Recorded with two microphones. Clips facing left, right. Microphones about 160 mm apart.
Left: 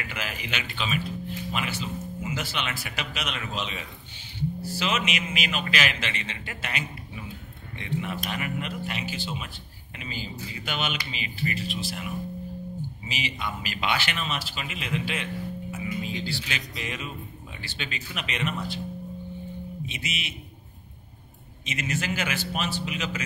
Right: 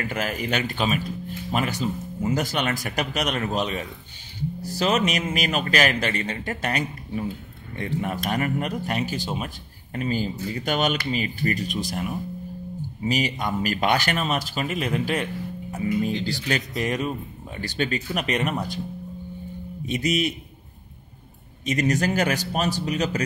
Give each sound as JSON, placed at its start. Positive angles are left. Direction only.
{"t": 0.0, "sound": "a man's voice", "side_deg": -45}
{"t": 19.9, "sound": "a man's voice", "side_deg": -40}
{"t": 21.6, "sound": "a man's voice", "side_deg": -40}